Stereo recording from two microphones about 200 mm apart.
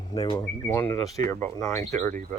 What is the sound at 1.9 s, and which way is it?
Speech, 40° right (ahead or behind).